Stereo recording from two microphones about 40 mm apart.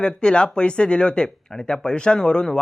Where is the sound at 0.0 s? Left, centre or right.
Left.